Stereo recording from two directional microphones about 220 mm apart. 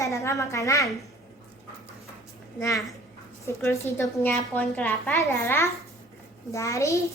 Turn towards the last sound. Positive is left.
turn(degrees=15)  # may be behind; listen again after turning